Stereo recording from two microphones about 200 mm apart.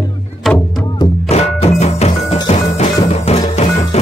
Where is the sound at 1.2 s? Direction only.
30° left (ahead or behind).